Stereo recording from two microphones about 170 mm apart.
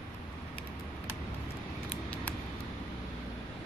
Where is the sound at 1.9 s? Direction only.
10° left (ahead or behind).